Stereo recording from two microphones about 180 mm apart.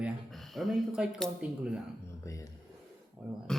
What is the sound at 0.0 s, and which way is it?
Speech, centre (ahead or behind).